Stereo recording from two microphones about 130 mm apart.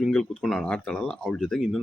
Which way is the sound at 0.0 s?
Centre (ahead or behind).